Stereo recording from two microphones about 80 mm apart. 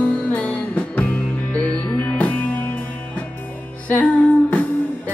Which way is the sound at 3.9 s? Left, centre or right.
Centre.